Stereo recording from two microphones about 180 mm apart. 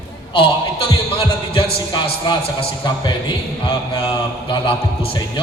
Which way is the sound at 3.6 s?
30° left (ahead or behind).